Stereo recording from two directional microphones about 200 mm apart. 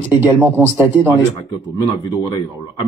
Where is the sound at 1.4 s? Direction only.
20° left (ahead or behind).